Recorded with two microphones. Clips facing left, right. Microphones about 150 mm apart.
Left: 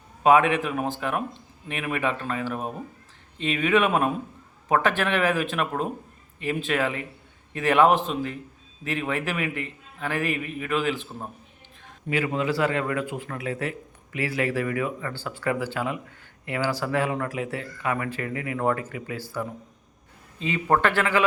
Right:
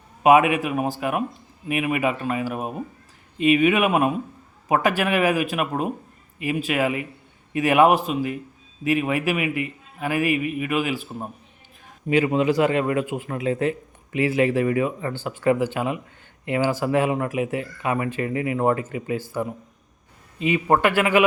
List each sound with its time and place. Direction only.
0.2 s a man's voice: 10° right (ahead or behind)
12.0 s a man's voice: 20° right (ahead or behind)